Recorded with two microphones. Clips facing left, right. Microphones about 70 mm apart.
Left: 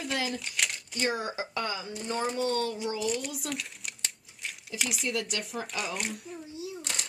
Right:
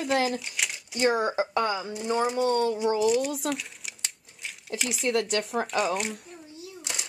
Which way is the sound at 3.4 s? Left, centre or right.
Centre.